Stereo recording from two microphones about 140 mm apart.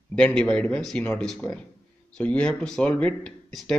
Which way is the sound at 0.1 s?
5° left (ahead or behind).